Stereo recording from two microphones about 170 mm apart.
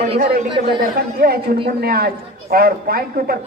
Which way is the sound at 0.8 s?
65° right (ahead or behind).